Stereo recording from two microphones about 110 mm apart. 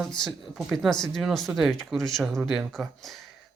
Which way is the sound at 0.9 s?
45° left (ahead or behind).